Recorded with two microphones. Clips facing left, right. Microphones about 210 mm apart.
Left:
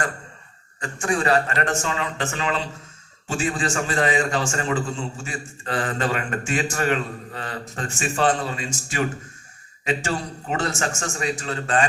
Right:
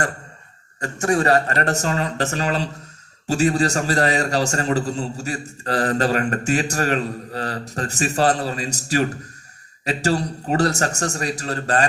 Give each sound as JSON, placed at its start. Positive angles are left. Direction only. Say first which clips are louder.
{"t": 0.8, "sound": "a man's voice", "louder": "right 4 dB", "side_deg": -40}